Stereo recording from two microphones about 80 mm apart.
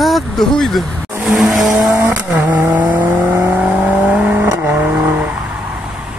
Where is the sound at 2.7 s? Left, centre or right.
Right.